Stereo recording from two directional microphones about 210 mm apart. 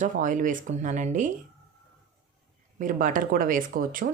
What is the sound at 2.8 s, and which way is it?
A woman's voice, 40° right (ahead or behind).